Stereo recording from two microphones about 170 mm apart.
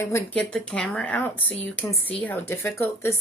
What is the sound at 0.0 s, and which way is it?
Speech, 10° left (ahead or behind).